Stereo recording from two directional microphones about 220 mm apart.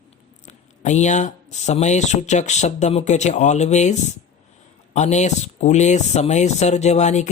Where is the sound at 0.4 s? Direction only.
35° left (ahead or behind).